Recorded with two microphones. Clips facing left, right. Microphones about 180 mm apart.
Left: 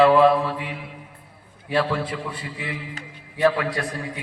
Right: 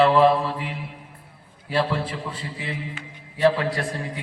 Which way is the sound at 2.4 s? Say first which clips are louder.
Even; 25° right (ahead or behind).